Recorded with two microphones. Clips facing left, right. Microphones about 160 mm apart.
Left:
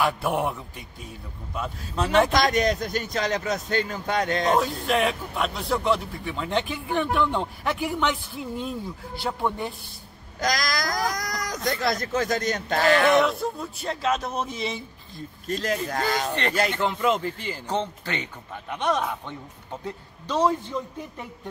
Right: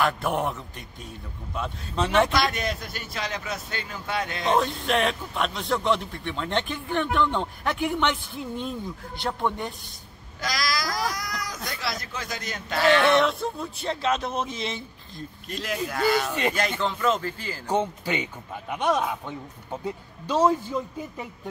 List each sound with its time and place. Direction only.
0.0 s a man's voice: 10° left (ahead or behind)
2.3 s speech: 40° left (ahead or behind)
4.6 s a man's voice: 5° left (ahead or behind)
10.4 s speech: 45° left (ahead or behind)
11.5 s speech: 20° left (ahead or behind)
11.8 s speech: 45° left (ahead or behind)
13.1 s a man's voice: 5° left (ahead or behind)
15.4 s speech: 40° left (ahead or behind)
16.3 s speech: 10° right (ahead or behind)